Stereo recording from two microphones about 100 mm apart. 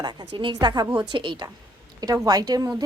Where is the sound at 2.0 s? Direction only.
40° right (ahead or behind).